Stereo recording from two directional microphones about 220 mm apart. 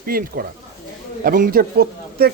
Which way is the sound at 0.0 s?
40° right (ahead or behind).